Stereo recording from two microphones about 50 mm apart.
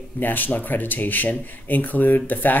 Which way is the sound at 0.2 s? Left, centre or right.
Left.